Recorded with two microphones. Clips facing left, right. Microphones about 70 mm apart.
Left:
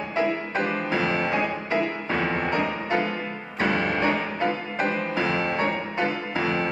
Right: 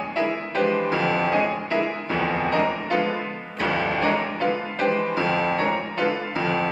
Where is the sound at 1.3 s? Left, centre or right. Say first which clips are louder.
Right 3 dB; centre.